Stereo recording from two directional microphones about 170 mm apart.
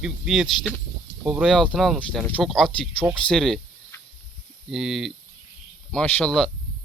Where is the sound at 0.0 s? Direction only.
5° right (ahead or behind).